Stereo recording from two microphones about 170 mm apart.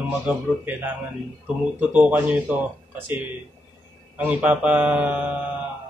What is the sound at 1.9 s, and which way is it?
Speech, 10° right (ahead or behind).